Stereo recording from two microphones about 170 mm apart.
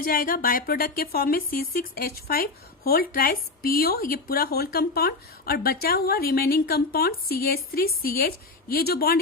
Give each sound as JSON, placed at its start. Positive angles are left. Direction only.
{"t": 0.0, "sound": "speech", "side_deg": 55}